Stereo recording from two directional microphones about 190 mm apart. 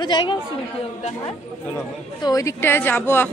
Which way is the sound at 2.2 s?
15° left (ahead or behind).